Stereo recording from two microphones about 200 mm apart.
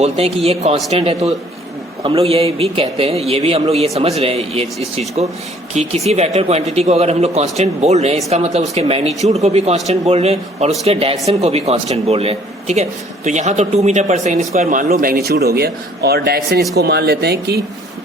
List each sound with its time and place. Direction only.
0.0 s a man's voice: 30° right (ahead or behind); by 17.6 s 55° right (ahead or behind)